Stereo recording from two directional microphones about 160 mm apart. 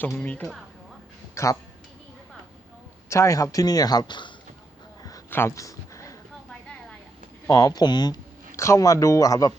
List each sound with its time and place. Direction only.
0.0 s speech: 10° left (ahead or behind)
3.1 s speech: 20° left (ahead or behind)
5.0 s a sound: 20° left (ahead or behind)
7.4 s speech: 20° left (ahead or behind)